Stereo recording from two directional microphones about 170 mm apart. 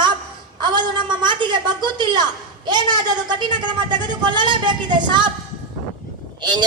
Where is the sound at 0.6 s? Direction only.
25° right (ahead or behind).